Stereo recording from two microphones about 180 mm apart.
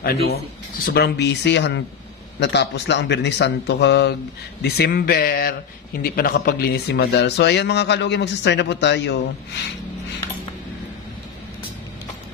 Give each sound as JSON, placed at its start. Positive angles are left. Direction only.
{"t": 0.0, "sound": "speech", "side_deg": 60}